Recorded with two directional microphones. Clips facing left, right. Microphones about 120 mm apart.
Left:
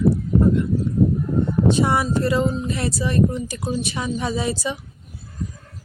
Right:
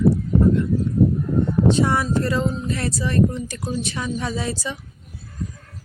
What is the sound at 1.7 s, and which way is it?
Speech, 15° left (ahead or behind).